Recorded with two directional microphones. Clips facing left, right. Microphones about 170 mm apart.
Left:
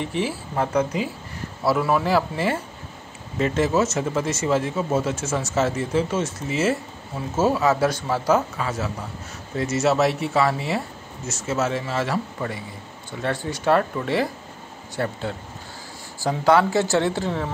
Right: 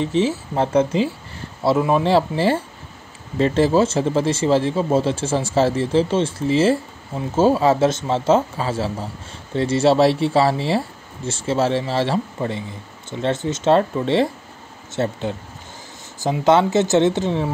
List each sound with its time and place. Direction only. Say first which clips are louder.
0.0 s speech: right 6 dB; 25° right (ahead or behind)